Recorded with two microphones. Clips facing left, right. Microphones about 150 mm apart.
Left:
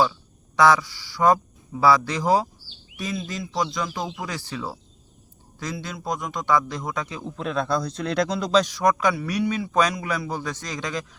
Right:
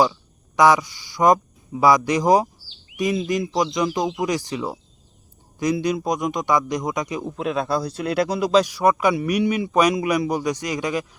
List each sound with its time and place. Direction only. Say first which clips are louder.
0.5 s a man's voice: right 2 dB; 15° right (ahead or behind)